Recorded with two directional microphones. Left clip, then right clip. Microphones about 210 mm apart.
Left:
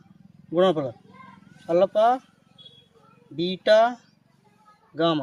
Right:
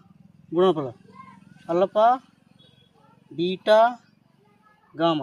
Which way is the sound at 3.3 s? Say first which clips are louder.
Even; 30° left (ahead or behind).